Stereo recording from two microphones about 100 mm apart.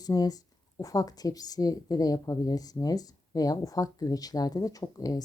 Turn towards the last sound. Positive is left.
turn(degrees=40)  # may be behind; listen again after turning